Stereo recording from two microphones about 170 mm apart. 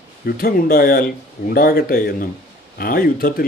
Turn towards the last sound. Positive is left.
turn(degrees=60)  # may be behind; listen again after turning